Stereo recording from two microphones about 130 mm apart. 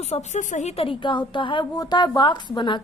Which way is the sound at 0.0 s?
60° left (ahead or behind).